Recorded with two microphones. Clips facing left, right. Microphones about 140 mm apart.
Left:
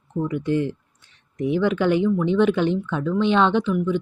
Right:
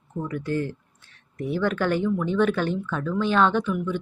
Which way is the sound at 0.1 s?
20° left (ahead or behind).